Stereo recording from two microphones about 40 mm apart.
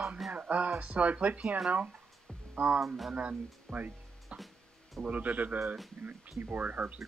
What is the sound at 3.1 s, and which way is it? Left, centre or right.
Speech, right.